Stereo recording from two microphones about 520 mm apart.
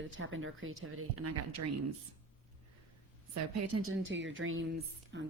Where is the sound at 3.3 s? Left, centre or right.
Right.